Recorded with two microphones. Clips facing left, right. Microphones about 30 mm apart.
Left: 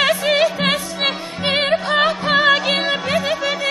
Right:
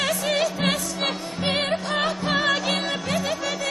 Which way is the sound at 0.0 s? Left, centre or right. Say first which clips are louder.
Left 7 dB; left.